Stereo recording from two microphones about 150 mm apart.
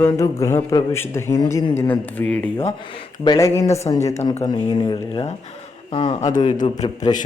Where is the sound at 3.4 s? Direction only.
20° left (ahead or behind).